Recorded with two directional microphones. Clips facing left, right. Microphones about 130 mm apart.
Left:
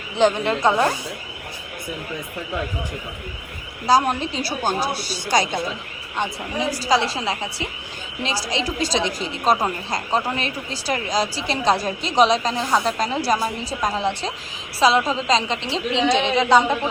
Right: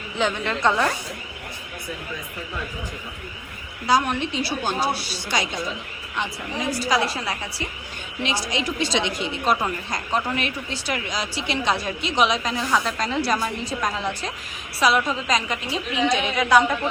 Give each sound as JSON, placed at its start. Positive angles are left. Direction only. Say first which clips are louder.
{"t": 0.2, "sound": "speech", "louder": "left 5 dB", "side_deg": 35}
{"t": 3.8, "sound": "speech", "louder": "left 3 dB", "side_deg": 35}
{"t": 6.8, "sound": "a woman's voice", "louder": "left 3 dB", "side_deg": 25}